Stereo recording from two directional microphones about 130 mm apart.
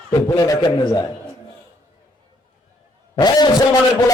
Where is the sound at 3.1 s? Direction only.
30° left (ahead or behind).